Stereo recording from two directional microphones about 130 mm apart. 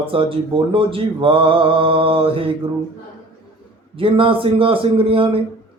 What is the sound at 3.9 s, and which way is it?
Speech, 45° right (ahead or behind).